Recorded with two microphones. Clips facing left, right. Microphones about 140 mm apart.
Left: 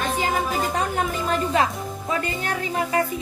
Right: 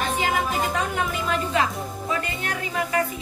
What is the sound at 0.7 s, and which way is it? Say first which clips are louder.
Music: left 2 dB; 40° left (ahead or behind).